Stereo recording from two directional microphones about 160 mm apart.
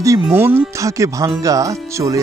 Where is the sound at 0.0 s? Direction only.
15° right (ahead or behind).